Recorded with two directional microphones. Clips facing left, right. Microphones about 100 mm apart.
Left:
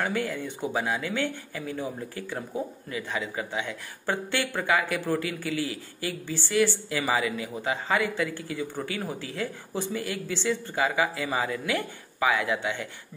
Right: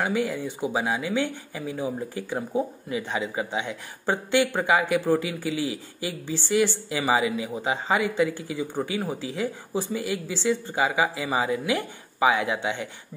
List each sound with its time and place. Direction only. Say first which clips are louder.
0.0 s speech: right 3 dB; 15° right (ahead or behind)